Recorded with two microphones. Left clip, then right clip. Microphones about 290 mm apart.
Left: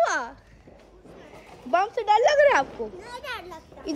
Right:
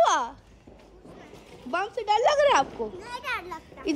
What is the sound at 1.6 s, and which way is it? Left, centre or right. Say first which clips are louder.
A child's voice: left 5 dB; centre.